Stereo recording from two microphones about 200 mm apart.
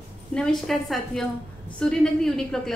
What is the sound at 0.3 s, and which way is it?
A woman's voice, 5° left (ahead or behind).